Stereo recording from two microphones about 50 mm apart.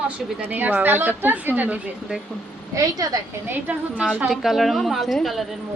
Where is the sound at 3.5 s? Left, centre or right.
Right.